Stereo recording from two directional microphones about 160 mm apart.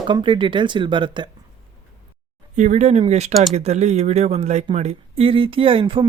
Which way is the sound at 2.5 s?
50° right (ahead or behind).